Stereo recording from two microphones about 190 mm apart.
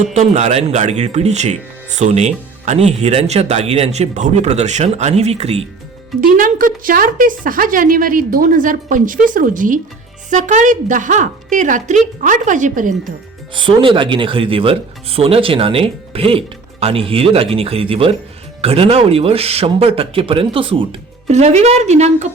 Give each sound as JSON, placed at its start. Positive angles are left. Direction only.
{"t": 0.1, "sound": "speech", "side_deg": -35}
{"t": 6.1, "sound": "speech", "side_deg": -45}
{"t": 13.5, "sound": "speech", "side_deg": -25}